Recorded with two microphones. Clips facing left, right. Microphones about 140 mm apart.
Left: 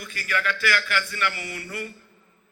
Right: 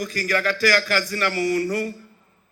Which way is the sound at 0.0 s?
40° right (ahead or behind).